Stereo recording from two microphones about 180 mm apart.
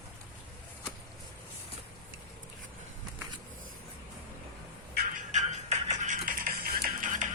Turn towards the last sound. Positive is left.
turn(degrees=-45)  # may be behind; listen again after turning